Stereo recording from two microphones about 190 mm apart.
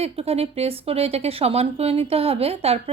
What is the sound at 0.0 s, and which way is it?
Speech, 30° right (ahead or behind).